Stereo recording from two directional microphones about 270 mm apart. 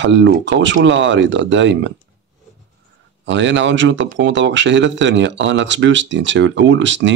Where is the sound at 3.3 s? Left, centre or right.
Right.